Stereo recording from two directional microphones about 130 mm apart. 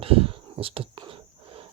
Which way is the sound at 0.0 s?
45° right (ahead or behind).